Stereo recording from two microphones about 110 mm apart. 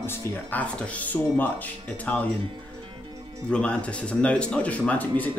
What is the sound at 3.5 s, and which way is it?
Speech, 10° left (ahead or behind).